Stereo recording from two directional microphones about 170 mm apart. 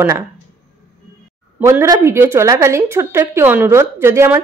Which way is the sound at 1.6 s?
15° right (ahead or behind).